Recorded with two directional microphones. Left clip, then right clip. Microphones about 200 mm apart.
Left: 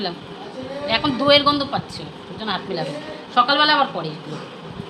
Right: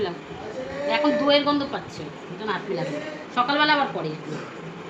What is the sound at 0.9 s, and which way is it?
A man's voice, 45° left (ahead or behind).